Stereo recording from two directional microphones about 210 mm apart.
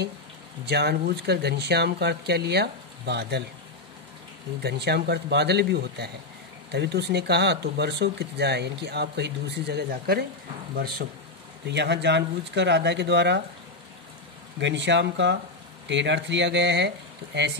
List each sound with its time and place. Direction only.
0.7 s speech: 50° right (ahead or behind)
4.6 s speech: 50° right (ahead or behind)
14.6 s speech: 60° right (ahead or behind)